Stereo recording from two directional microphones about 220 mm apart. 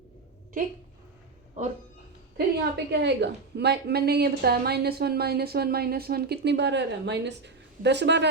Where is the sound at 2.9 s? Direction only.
50° right (ahead or behind).